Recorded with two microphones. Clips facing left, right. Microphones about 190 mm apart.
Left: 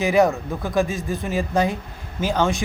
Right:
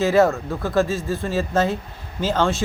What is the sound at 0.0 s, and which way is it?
A man's voice, 15° left (ahead or behind).